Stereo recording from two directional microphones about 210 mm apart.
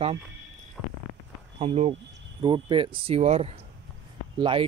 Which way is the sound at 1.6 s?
30° right (ahead or behind).